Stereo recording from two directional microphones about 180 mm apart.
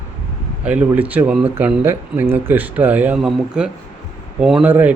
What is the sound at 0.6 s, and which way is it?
A man's voice, 5° right (ahead or behind).